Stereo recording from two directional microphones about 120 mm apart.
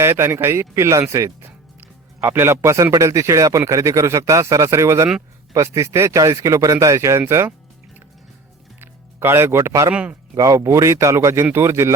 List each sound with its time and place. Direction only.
0.0 s speech: 20° right (ahead or behind)
8.8 s speech: 20° right (ahead or behind)
9.9 s speech: 10° right (ahead or behind)
10.3 s speech: 30° right (ahead or behind)